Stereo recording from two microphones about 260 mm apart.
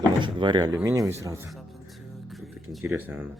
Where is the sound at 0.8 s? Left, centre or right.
Centre.